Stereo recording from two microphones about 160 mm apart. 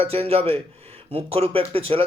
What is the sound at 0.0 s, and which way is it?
Speech, 35° right (ahead or behind).